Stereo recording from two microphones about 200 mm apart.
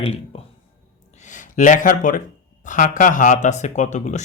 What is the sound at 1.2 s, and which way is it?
Speech, 40° left (ahead or behind).